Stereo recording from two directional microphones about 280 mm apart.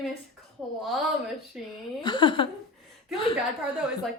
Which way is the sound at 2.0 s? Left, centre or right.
Centre.